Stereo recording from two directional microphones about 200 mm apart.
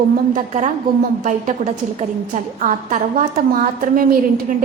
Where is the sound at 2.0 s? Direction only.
40° right (ahead or behind).